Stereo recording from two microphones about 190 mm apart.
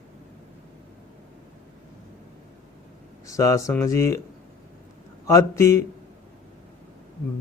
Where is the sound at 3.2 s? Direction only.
15° left (ahead or behind).